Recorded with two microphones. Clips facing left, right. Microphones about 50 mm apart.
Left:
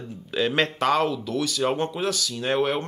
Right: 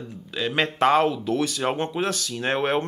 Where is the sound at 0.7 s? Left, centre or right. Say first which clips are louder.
Right 3 dB; right.